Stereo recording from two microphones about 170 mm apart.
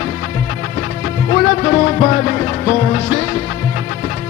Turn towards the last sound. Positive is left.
turn(degrees=35)  # may be behind; listen again after turning